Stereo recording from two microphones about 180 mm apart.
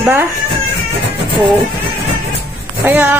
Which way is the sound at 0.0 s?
10° right (ahead or behind).